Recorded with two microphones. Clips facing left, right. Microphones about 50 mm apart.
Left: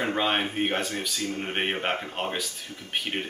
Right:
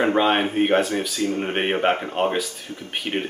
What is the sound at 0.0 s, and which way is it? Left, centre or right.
Speech, centre.